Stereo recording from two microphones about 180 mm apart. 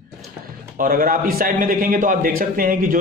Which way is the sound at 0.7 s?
50° right (ahead or behind).